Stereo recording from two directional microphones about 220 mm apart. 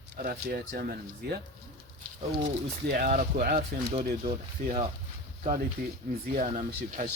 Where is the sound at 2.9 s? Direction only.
40° right (ahead or behind).